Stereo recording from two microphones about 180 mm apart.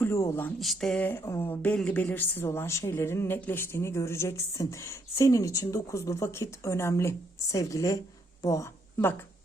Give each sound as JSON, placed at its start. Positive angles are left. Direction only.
{"t": 0.0, "sound": "speech", "side_deg": 15}
{"t": 0.6, "sound": "speech", "side_deg": 0}